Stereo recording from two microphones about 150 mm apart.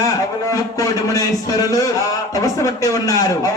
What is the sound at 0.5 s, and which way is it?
A man's voice, 20° left (ahead or behind).